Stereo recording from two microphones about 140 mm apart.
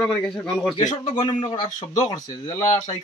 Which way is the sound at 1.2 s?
35° left (ahead or behind).